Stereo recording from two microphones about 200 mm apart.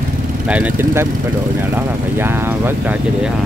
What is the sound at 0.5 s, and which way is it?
Speech, 10° right (ahead or behind).